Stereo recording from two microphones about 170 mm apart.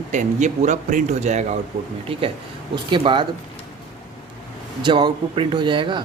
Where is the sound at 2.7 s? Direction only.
30° right (ahead or behind).